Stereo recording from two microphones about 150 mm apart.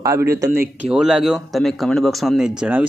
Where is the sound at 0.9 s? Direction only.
5° right (ahead or behind).